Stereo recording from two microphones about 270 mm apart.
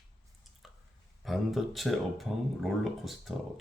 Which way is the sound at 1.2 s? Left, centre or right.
Centre.